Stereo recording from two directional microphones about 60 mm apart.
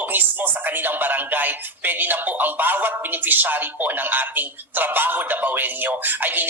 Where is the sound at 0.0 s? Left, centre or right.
Right.